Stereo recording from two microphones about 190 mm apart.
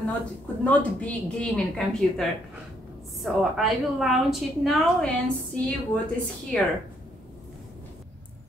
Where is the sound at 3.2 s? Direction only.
Centre (ahead or behind).